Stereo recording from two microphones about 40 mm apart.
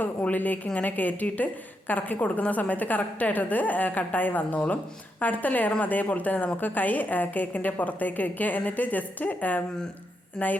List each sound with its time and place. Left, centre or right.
0.0 s a woman's voice: left